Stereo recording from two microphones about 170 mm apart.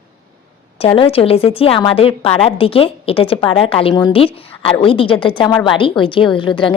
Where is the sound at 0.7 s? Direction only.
35° left (ahead or behind).